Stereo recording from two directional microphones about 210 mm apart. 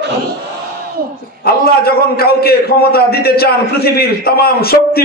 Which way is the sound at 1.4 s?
45° left (ahead or behind).